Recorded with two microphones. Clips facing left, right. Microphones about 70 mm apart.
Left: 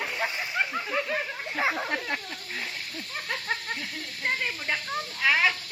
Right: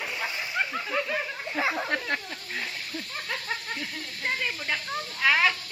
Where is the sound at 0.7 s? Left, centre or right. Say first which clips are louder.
Even; centre.